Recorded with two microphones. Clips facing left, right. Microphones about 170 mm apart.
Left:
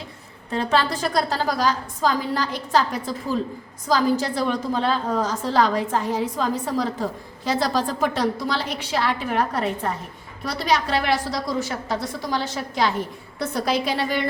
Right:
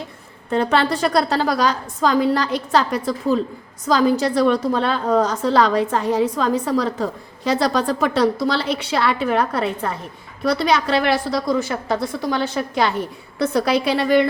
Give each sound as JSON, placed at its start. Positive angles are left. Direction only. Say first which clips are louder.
{"t": 0.5, "sound": "a woman's voice", "louder": "right 4 dB", "side_deg": -60}